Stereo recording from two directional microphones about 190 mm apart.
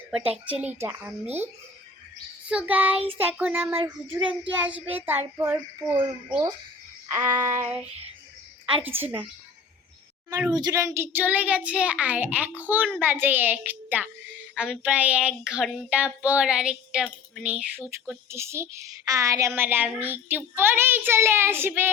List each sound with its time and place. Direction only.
0.4 s child singing: 10° right (ahead or behind)
2.5 s child singing: 5° right (ahead or behind)
6.0 s a child's voice: 25° right (ahead or behind)
7.1 s child singing: 15° right (ahead or behind)
9.0 s child singing: 10° right (ahead or behind)
10.5 s child singing: 20° right (ahead or behind)